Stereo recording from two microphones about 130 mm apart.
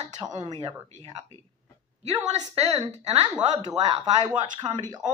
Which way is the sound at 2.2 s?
60° right (ahead or behind).